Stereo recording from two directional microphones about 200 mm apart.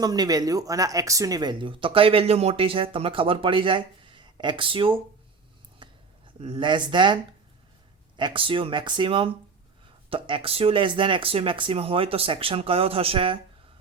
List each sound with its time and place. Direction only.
0.0 s speech: 20° right (ahead or behind)
5.8 s a sound: 25° right (ahead or behind)
6.4 s speech: 25° right (ahead or behind)